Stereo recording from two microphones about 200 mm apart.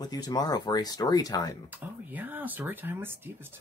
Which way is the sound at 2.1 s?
10° right (ahead or behind).